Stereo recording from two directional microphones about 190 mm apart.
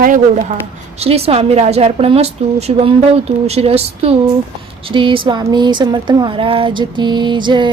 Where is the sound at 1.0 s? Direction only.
30° right (ahead or behind).